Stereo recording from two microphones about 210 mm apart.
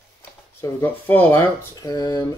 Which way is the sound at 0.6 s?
10° left (ahead or behind).